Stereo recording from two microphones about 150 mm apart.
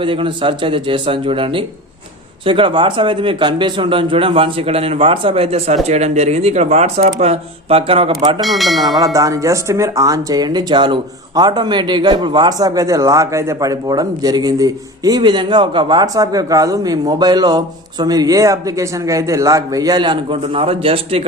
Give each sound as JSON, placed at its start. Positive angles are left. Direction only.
{"t": 0.0, "sound": "speech", "side_deg": -35}
{"t": 8.4, "sound": "speech", "side_deg": 0}
{"t": 9.1, "sound": "speech", "side_deg": -20}